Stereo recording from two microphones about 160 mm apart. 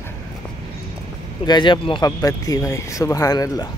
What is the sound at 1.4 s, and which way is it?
Speech, 30° left (ahead or behind).